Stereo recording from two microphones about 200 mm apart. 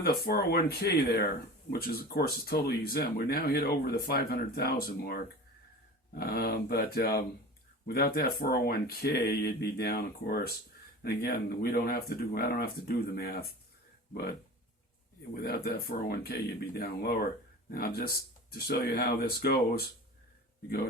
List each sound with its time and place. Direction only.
0.0 s speech: 50° left (ahead or behind)
15.4 s speech: 50° left (ahead or behind)